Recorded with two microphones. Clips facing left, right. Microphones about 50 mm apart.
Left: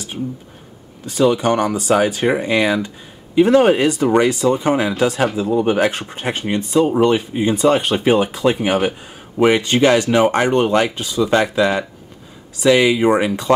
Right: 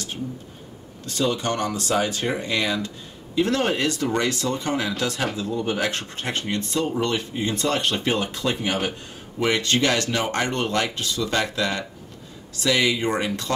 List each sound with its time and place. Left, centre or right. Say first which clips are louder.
1.0 s speech: left 9 dB; centre
5.6 s speech: left 9 dB; left
5.9 s speech: left 6 dB; centre